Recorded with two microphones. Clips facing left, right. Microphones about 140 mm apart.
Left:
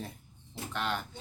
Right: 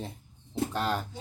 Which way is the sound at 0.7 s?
35° right (ahead or behind).